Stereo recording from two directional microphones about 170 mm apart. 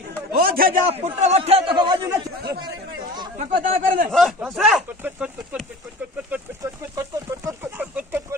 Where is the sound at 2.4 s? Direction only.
70° right (ahead or behind).